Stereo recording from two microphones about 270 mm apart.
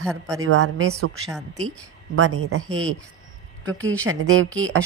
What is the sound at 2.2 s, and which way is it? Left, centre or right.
Speech, right.